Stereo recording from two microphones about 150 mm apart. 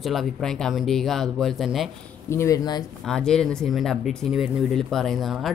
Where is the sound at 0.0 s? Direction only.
Centre (ahead or behind).